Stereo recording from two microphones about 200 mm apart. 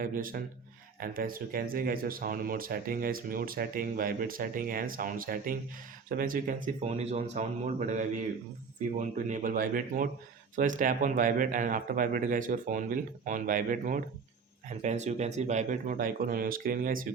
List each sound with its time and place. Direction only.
0.0 s a man's voice: 45° right (ahead or behind)